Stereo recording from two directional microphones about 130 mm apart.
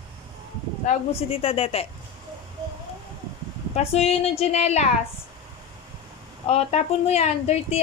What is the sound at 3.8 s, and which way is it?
Speech, 50° left (ahead or behind).